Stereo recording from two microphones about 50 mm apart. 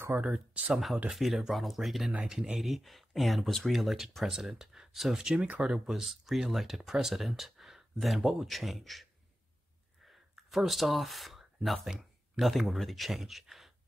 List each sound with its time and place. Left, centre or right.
0.1 s speech: right
1.1 s speech: centre
10.3 s speech: centre